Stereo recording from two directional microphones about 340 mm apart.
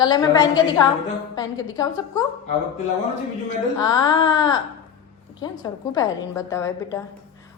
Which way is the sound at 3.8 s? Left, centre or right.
Centre.